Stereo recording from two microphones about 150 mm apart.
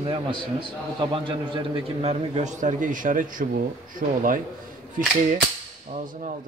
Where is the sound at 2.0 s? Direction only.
45° right (ahead or behind); by 4.4 s 65° right (ahead or behind).